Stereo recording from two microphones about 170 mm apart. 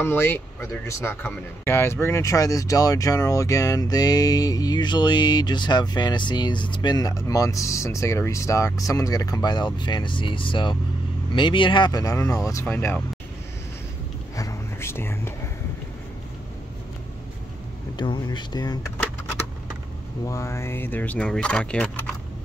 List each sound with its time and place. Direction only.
0.0 s speech: 15° left (ahead or behind)
14.3 s whispering: 20° left (ahead or behind)
17.9 s speech: 25° left (ahead or behind)
20.2 s speech: 15° left (ahead or behind)